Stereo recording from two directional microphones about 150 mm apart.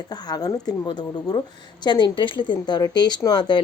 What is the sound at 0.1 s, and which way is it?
A woman's voice, 25° left (ahead or behind).